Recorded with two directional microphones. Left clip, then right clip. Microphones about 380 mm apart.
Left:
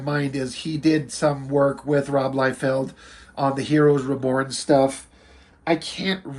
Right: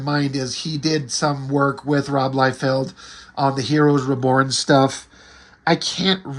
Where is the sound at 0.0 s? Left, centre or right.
Centre.